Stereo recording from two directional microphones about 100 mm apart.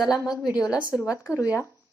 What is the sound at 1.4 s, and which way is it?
Speech, 30° left (ahead or behind).